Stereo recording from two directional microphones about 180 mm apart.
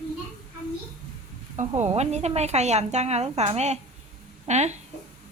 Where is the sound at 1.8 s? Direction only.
40° right (ahead or behind).